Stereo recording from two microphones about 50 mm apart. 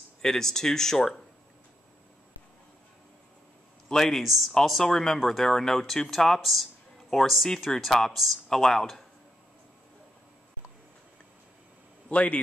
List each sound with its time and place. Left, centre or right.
0.2 s speech: centre
3.9 s a man's voice: centre
12.1 s a man's voice: left